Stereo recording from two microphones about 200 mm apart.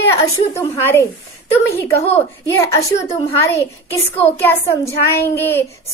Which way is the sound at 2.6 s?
15° left (ahead or behind).